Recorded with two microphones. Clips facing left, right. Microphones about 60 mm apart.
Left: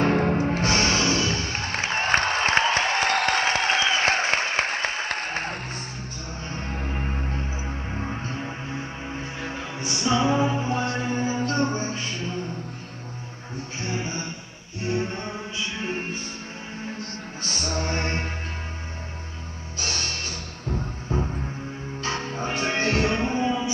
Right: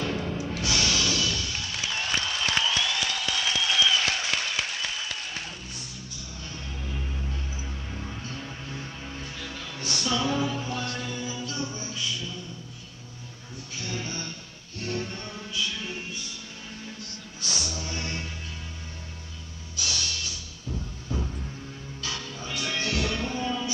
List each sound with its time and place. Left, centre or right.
0.0 s music: left
13.7 s music: left
19.8 s music: left